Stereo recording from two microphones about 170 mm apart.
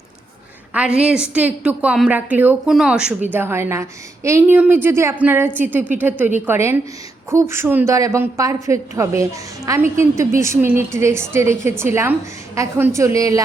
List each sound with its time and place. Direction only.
0.7 s a woman's voice: 5° right (ahead or behind)